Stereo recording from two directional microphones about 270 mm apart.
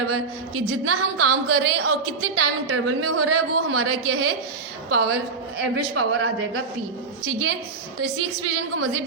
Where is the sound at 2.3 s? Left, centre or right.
Right.